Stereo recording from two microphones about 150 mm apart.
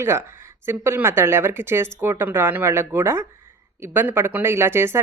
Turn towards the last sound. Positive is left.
turn(degrees=-15)  # may be behind; listen again after turning